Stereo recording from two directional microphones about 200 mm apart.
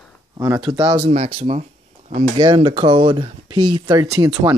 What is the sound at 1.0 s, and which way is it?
Speech, 35° right (ahead or behind).